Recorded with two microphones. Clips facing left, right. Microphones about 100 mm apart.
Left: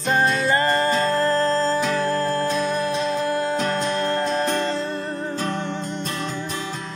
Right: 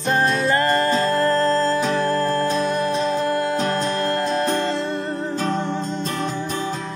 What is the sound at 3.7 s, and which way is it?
Music, centre (ahead or behind).